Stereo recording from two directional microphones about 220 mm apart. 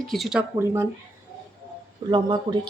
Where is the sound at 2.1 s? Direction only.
20° right (ahead or behind).